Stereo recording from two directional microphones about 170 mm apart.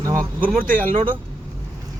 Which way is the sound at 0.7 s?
50° right (ahead or behind).